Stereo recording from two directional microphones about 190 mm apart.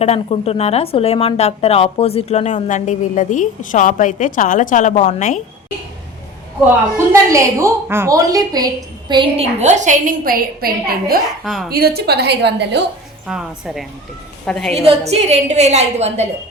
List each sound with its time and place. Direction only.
0.0 s a woman's voice: 35° left (ahead or behind)
6.9 s a woman's voice: 15° right (ahead or behind); by 10.7 s 50° right (ahead or behind)
11.4 s a woman's voice: centre (ahead or behind)
11.7 s a woman's voice: 55° right (ahead or behind)
13.2 s a woman's voice: centre (ahead or behind)
14.8 s a woman's voice: 35° right (ahead or behind)